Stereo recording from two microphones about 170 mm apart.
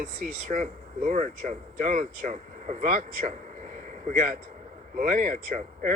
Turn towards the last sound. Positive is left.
turn(degrees=-50)  # may be behind; listen again after turning